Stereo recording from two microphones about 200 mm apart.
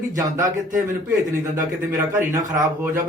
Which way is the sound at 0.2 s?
15° right (ahead or behind).